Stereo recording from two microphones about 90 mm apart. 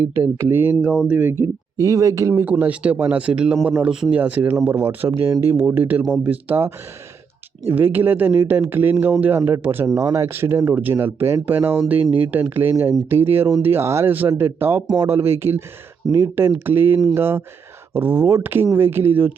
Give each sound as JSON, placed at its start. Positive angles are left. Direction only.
{"t": 0.1, "sound": "speech", "side_deg": -25}
{"t": 1.8, "sound": "speech", "side_deg": -40}
{"t": 2.3, "sound": "speech", "side_deg": -20}
{"t": 9.8, "sound": "speech", "side_deg": -40}